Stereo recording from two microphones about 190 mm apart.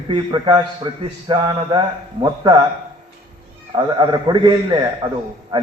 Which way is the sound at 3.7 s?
20° right (ahead or behind).